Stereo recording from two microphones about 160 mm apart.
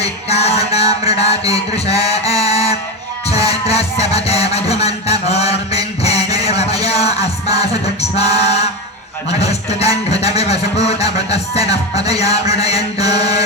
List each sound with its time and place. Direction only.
0.0 s music: 40° left (ahead or behind)